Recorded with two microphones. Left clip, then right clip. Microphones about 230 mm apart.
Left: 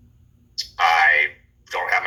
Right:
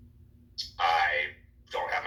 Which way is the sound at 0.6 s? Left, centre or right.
Left.